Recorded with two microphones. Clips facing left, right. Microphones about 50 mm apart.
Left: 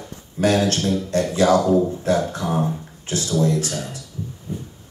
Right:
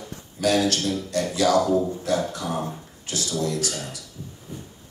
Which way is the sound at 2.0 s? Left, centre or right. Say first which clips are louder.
Left 4 dB; left.